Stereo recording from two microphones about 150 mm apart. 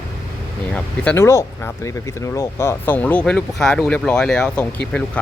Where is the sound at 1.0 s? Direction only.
15° left (ahead or behind).